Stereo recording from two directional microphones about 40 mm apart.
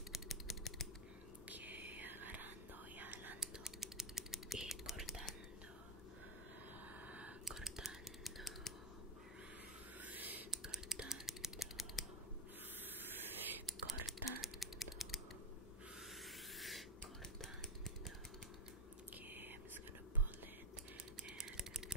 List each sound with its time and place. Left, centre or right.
0.1 s typing: centre
1.5 s whispering: right
3.3 s typing: centre
7.1 s a sound: right
7.4 s computer keyboard: centre
10.0 s a sound: right
10.5 s computer keyboard: centre
11.0 s typing: centre
13.7 s computer keyboard: centre
16.5 s filing: centre
21.2 s typing: centre